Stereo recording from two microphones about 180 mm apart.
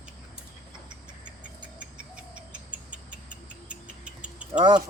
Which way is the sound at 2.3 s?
5° right (ahead or behind).